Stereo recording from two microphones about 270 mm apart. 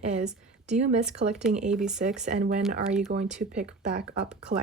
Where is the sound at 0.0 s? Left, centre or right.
Right.